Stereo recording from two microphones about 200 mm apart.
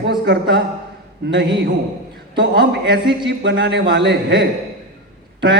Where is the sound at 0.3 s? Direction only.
55° right (ahead or behind).